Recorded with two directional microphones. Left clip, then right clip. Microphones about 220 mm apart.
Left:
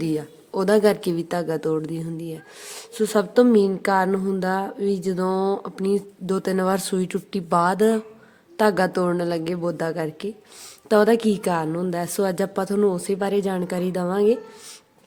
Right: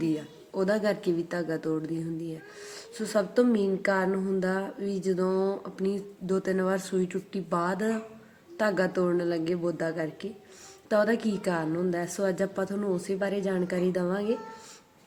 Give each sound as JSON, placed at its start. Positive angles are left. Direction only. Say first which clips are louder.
{"t": 0.0, "sound": "a woman's voice", "louder": "left 4 dB", "side_deg": 50}